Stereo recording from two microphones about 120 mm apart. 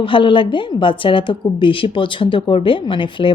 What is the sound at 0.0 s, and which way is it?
A woman's voice, 45° left (ahead or behind).